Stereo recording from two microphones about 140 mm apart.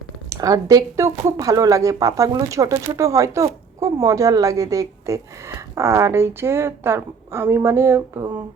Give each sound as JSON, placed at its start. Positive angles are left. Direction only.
{"t": 0.3, "sound": "speech", "side_deg": -25}